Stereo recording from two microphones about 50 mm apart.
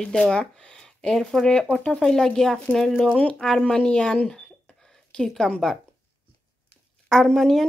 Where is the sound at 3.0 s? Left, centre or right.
Left.